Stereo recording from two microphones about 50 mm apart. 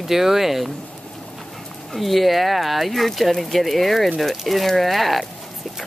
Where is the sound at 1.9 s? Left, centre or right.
Centre.